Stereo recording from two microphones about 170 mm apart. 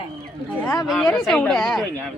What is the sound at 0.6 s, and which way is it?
Speech, 15° left (ahead or behind).